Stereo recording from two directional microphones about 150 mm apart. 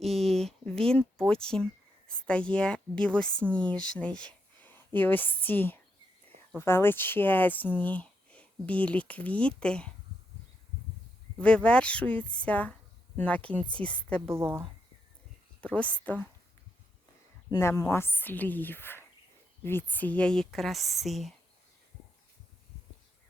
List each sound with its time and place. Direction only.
0.0 s a sound: centre (ahead or behind)
1.3 s speech: 5° left (ahead or behind)
11.3 s speech: 5° left (ahead or behind)
14.3 s speech: 15° right (ahead or behind)
15.6 s speech: 10° left (ahead or behind)
17.5 s speech: 20° left (ahead or behind); by 21.3 s centre (ahead or behind)